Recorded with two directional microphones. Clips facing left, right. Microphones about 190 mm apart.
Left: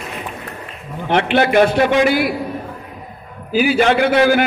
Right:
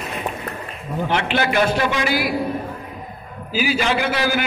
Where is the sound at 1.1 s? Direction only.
55° left (ahead or behind).